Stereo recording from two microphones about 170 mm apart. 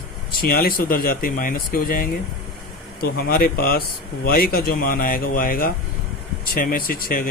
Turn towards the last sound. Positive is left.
turn(degrees=60)  # may be behind; listen again after turning